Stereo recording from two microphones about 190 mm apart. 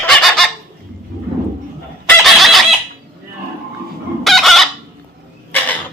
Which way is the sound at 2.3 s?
Centre (ahead or behind).